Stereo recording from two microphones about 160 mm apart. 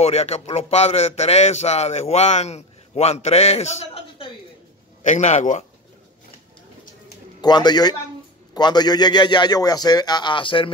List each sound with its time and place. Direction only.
0.0 s a man's voice: 40° left (ahead or behind)
7.4 s a man's voice: 25° left (ahead or behind)